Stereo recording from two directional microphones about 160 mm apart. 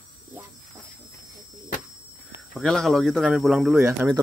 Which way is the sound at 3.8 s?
15° right (ahead or behind).